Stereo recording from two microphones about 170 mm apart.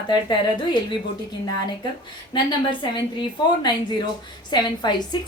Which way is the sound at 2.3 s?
25° left (ahead or behind).